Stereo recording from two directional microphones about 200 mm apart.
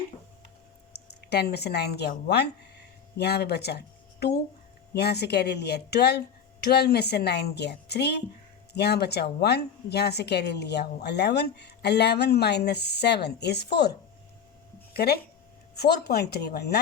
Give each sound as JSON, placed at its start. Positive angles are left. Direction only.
{"t": 1.2, "sound": "a woman's voice", "side_deg": 55}
{"t": 14.9, "sound": "a woman's voice", "side_deg": 50}